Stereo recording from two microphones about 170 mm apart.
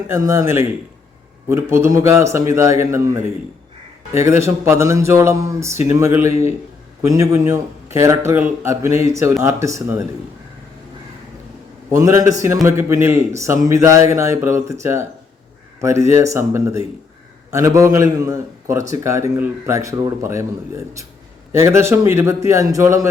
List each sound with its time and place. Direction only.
0.1 s a man's voice: 15° right (ahead or behind)
11.9 s a man's voice: 20° right (ahead or behind)